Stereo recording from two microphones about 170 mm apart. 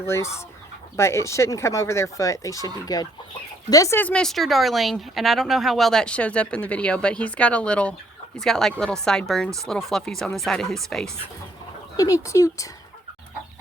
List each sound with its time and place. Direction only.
0.0 s speech: 15° left (ahead or behind)
11.9 s speech: 20° left (ahead or behind)